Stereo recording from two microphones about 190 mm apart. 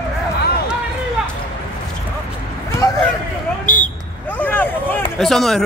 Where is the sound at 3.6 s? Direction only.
45° left (ahead or behind).